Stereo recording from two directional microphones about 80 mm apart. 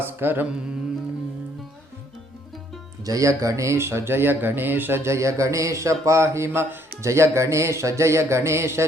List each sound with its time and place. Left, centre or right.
0.0 s mantra: right
3.0 s speech: right